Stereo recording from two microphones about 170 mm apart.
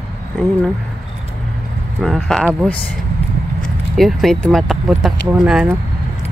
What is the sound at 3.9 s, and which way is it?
Speech, centre (ahead or behind).